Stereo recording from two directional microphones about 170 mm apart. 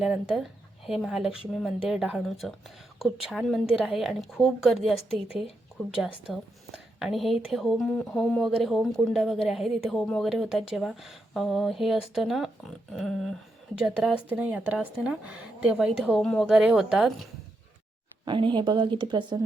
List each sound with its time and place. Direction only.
0.0 s a woman's voice: 5° right (ahead or behind)
18.3 s a woman's voice: 30° right (ahead or behind)